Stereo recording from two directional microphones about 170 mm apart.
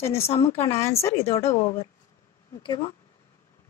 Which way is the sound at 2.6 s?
30° left (ahead or behind).